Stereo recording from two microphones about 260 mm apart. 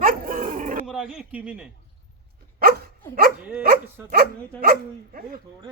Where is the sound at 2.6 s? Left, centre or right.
Right.